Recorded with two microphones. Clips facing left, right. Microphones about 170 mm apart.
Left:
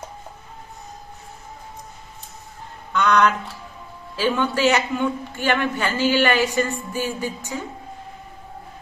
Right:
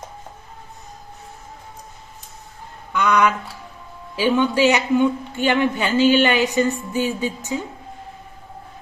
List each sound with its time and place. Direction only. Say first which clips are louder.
2.9 s a woman's voice: even; 10° right (ahead or behind)
6.9 s music: right 4 dB; 20° right (ahead or behind)